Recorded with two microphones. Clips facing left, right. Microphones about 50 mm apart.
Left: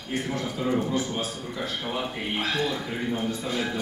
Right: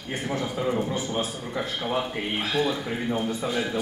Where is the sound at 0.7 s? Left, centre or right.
Centre.